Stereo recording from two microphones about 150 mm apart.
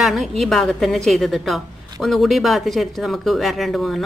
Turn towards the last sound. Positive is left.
turn(degrees=0)  # may be behind; listen again after turning